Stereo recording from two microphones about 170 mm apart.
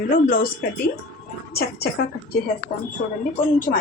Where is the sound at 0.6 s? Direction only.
55° left (ahead or behind).